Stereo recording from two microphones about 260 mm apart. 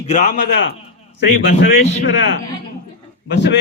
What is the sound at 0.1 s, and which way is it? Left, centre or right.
Speech, left.